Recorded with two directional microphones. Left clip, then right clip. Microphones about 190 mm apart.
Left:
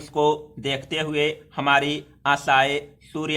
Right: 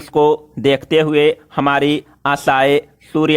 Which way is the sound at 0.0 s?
45° right (ahead or behind).